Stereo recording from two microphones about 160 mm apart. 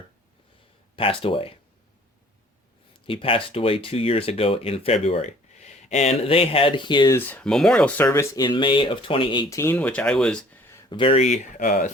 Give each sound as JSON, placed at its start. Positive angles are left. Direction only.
{"t": 0.9, "sound": "speech", "side_deg": 35}
{"t": 3.1, "sound": "speech", "side_deg": 35}
{"t": 7.1, "sound": "speech", "side_deg": 10}
{"t": 9.5, "sound": "speech", "side_deg": 15}
{"t": 10.8, "sound": "speech", "side_deg": 30}
{"t": 11.6, "sound": "speech", "side_deg": 60}